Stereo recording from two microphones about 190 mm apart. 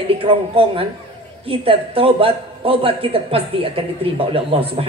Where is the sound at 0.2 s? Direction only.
30° right (ahead or behind).